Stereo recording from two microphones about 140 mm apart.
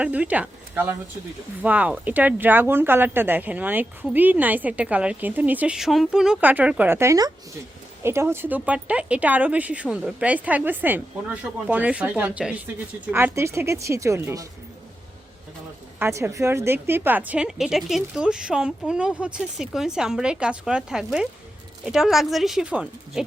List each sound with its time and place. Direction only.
0.0 s a woman's voice: 10° right (ahead or behind)
16.0 s a woman's voice: 15° right (ahead or behind)